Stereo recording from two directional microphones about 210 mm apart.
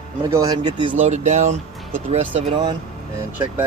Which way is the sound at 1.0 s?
35° right (ahead or behind).